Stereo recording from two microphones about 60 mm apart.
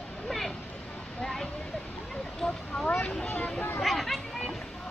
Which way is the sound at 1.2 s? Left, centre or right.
Centre.